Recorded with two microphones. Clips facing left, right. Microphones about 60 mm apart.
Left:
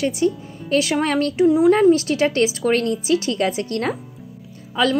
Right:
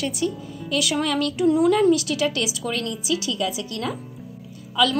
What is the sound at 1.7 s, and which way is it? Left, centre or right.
A woman's voice, left.